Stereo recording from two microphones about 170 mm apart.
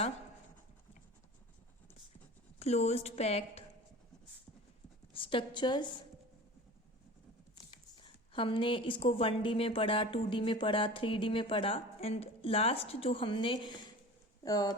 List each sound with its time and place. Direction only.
2.6 s a woman's voice: 40° left (ahead or behind)
5.1 s a woman's voice: 30° left (ahead or behind)
7.9 s a woman's voice: 30° left (ahead or behind)